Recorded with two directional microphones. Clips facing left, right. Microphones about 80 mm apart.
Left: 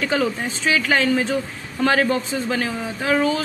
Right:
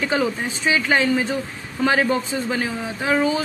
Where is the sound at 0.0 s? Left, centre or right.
Centre.